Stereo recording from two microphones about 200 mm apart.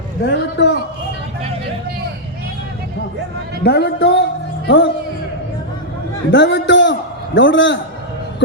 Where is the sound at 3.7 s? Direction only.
55° left (ahead or behind).